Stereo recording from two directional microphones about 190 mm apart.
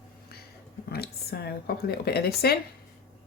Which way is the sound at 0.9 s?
55° left (ahead or behind).